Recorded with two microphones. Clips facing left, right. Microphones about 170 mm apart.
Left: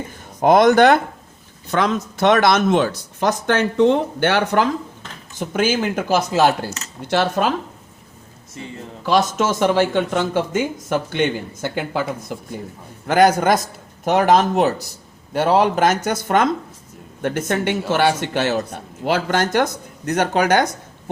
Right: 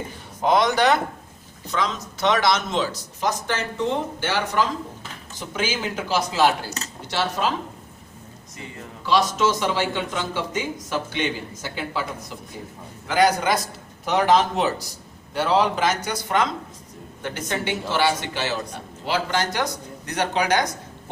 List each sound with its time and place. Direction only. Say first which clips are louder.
0.4 s speech: left 7 dB; 50° left (ahead or behind)
9.0 s speech: left 2 dB; 50° left (ahead or behind)